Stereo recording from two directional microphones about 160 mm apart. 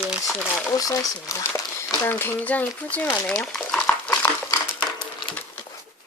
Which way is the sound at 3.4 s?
5° left (ahead or behind).